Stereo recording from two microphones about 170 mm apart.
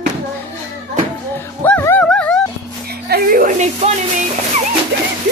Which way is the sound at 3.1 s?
60° right (ahead or behind).